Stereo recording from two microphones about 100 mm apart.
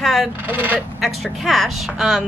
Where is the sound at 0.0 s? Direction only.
Centre (ahead or behind).